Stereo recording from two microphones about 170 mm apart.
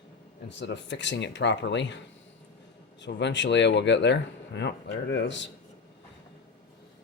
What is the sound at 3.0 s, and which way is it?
Speech, 90° left.